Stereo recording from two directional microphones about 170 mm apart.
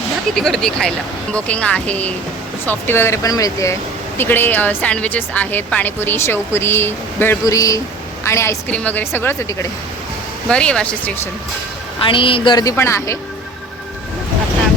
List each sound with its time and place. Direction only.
0.3 s speech: 5° left (ahead or behind)
10.5 s speech: 5° left (ahead or behind)
12.0 s a woman's voice: 30° left (ahead or behind); by 13.1 s 15° left (ahead or behind)